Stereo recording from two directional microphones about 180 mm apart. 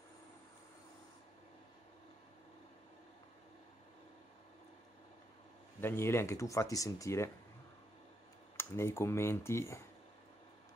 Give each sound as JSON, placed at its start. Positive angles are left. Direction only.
{"t": 5.8, "sound": "speech", "side_deg": 15}
{"t": 8.5, "sound": "speech", "side_deg": 15}